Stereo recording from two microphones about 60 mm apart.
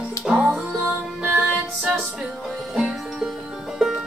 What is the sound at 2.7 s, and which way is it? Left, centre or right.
Music, centre.